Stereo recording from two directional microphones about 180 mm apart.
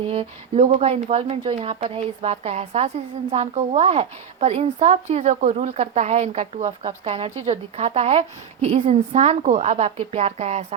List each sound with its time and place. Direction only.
0.1 s speech: 35° right (ahead or behind)